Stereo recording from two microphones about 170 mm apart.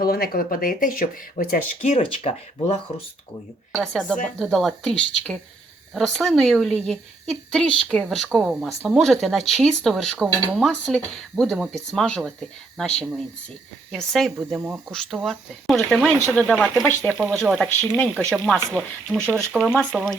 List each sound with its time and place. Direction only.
0.0 s speech: 60° left (ahead or behind)
1.8 s speech: 35° left (ahead or behind)
4.4 s speech: centre (ahead or behind)
13.9 s speech: centre (ahead or behind)